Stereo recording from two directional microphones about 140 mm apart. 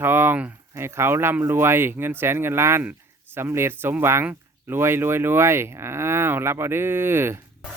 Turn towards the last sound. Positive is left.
turn(degrees=-15)  # may be behind; listen again after turning